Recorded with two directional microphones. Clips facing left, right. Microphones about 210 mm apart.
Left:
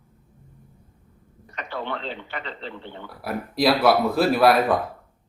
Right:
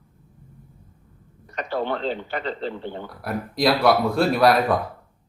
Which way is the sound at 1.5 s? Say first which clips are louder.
Right 5 dB; 40° right (ahead or behind).